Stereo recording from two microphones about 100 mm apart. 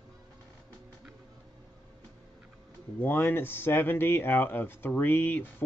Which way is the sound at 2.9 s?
20° left (ahead or behind).